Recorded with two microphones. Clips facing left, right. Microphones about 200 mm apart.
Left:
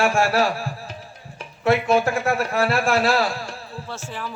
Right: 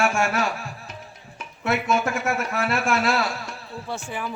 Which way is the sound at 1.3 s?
35° left (ahead or behind).